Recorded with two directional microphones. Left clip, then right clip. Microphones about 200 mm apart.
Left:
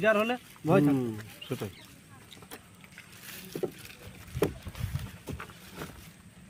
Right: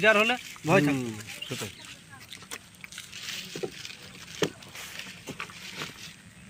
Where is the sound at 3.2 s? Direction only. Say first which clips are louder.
Right 1 dB; 45° left (ahead or behind).